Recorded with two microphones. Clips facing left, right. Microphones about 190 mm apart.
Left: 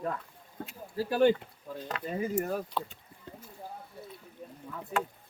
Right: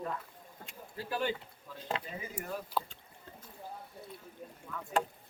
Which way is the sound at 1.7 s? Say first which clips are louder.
Left 3 dB; 50° left (ahead or behind).